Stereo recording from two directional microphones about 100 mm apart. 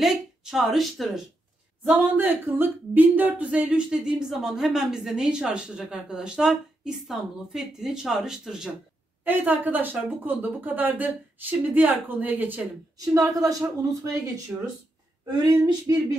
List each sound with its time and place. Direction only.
0.0 s speech: 5° right (ahead or behind)
1.9 s speech: 20° right (ahead or behind)
9.2 s speech: 20° right (ahead or behind)
13.0 s a woman's voice: 35° right (ahead or behind)
15.9 s speech: 30° right (ahead or behind)